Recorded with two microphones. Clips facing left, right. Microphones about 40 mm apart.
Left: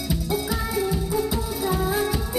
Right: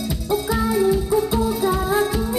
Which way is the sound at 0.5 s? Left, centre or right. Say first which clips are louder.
Right 7 dB; centre.